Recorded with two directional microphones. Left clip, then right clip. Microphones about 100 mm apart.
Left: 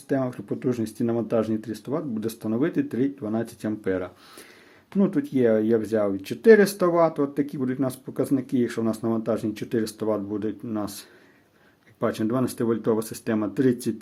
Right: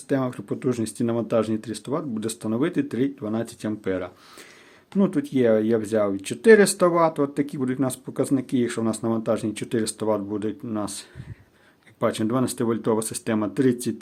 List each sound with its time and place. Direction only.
0.1 s speech: 20° right (ahead or behind)